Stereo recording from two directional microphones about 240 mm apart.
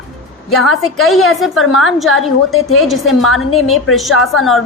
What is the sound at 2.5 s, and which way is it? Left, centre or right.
Speech, left.